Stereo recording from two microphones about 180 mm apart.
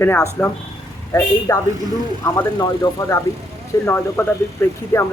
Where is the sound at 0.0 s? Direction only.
15° left (ahead or behind).